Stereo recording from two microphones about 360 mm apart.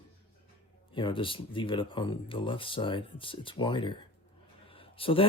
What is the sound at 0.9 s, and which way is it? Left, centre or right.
Speech, centre.